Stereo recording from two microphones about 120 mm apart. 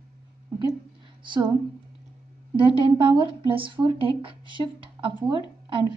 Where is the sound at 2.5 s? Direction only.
45° right (ahead or behind).